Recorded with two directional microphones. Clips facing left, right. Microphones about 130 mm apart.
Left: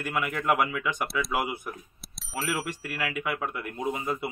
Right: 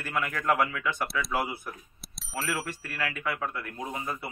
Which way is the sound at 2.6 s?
20° left (ahead or behind).